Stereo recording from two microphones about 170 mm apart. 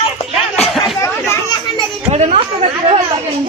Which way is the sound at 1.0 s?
15° left (ahead or behind).